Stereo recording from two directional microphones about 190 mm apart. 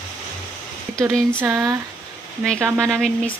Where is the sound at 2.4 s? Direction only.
5° left (ahead or behind).